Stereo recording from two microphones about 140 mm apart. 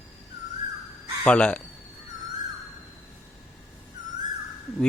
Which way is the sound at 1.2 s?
10° left (ahead or behind).